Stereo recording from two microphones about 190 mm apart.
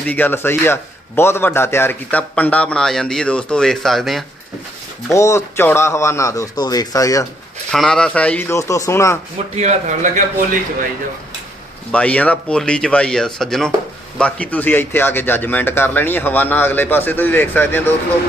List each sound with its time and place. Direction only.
0.0 s a man's voice: 10° left (ahead or behind)
5.1 s a man's voice: 15° left (ahead or behind)
7.7 s a man's voice: 5° left (ahead or behind)
9.6 s a man's voice: 40° right (ahead or behind)
11.9 s a man's voice: 5° left (ahead or behind)